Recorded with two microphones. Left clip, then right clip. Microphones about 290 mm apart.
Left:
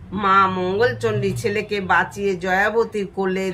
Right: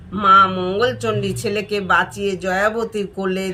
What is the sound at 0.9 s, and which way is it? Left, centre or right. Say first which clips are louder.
Speech: even; left.